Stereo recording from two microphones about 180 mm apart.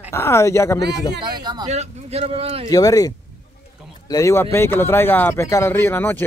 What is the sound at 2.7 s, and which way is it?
Speech, 20° left (ahead or behind).